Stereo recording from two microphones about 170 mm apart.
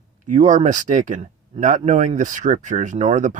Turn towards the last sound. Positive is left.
turn(degrees=-45)  # may be behind; listen again after turning